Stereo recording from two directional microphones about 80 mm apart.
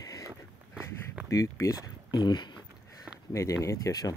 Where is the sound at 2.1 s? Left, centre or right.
Left.